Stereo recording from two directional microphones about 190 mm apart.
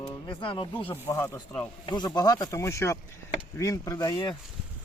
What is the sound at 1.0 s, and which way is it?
Speech, 15° left (ahead or behind).